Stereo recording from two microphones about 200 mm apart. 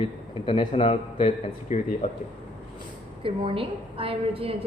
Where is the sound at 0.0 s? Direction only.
25° left (ahead or behind).